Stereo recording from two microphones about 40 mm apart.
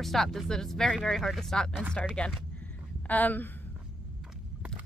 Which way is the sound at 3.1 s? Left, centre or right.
Left.